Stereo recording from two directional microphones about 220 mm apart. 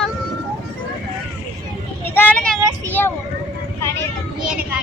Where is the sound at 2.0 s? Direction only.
10° left (ahead or behind).